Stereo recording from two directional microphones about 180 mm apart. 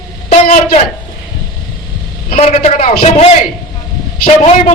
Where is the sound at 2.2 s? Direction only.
35° left (ahead or behind).